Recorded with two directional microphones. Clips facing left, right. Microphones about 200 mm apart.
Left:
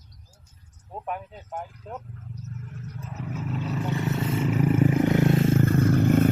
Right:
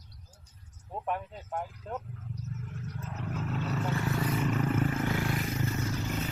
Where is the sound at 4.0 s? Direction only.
20° left (ahead or behind).